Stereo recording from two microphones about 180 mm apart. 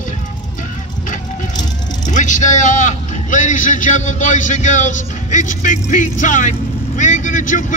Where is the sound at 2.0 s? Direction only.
45° left (ahead or behind).